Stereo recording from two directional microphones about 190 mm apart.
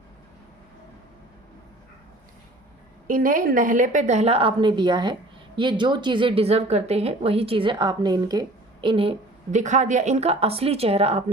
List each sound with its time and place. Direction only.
3.1 s a woman's voice: 45° right (ahead or behind)